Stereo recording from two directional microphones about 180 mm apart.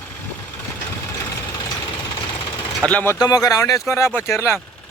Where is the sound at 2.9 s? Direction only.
10° left (ahead or behind).